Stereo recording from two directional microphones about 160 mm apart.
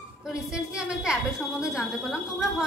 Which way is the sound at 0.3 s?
5° right (ahead or behind).